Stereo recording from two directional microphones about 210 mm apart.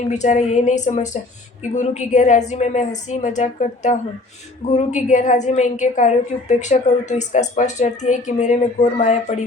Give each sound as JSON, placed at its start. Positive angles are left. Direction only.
{"t": 0.1, "sound": "a woman's voice", "side_deg": 35}